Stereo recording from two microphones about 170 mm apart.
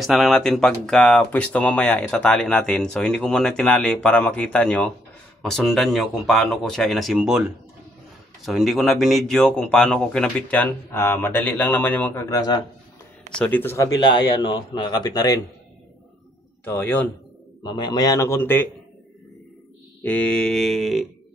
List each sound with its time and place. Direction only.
0.0 s speech: centre (ahead or behind); by 12.6 s 25° left (ahead or behind)
13.4 s speech: 10° left (ahead or behind)
14.3 s speech: 30° left (ahead or behind)
16.6 s speech: 10° left (ahead or behind)
17.6 s speech: 25° left (ahead or behind)
20.0 s speech: 10° left (ahead or behind)